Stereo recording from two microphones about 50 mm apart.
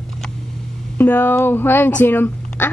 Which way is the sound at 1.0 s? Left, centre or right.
Left.